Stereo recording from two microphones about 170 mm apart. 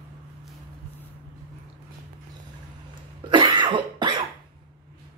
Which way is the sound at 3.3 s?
25° right (ahead or behind).